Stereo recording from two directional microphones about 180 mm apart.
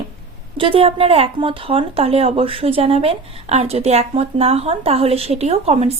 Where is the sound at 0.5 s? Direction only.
30° right (ahead or behind).